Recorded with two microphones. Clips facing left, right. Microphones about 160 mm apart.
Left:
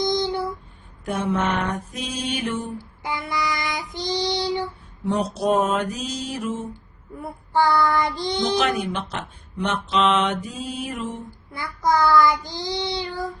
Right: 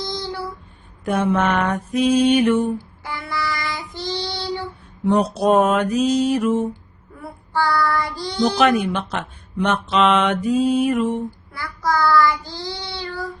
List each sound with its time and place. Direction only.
0.0 s a sound: 20° left (ahead or behind)
1.0 s speech: 60° right (ahead or behind)
3.0 s child singing: 20° left (ahead or behind)
5.0 s speech: 60° right (ahead or behind)
7.2 s child singing: 20° left (ahead or behind)
8.5 s speech: 55° right (ahead or behind)
11.5 s child singing: 20° left (ahead or behind)